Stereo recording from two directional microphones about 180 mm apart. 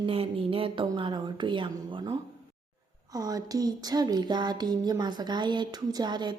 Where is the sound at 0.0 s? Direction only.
30° right (ahead or behind).